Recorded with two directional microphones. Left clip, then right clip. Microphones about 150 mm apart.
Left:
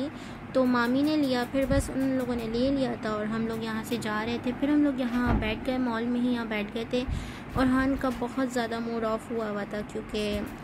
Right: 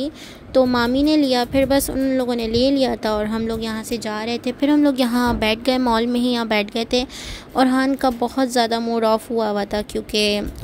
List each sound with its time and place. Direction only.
0.0 s a woman's voice: 50° right (ahead or behind); by 10.4 s 75° right (ahead or behind)